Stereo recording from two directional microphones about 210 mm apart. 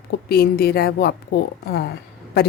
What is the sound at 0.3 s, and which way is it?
A woman's voice, 45° left (ahead or behind).